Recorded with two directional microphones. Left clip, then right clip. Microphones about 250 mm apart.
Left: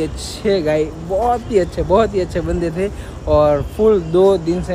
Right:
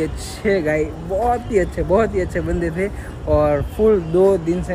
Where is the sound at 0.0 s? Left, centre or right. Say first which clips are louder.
Left 1 dB; centre.